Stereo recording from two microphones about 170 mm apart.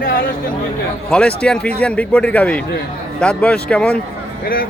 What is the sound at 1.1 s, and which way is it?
A man's voice, 5° left (ahead or behind).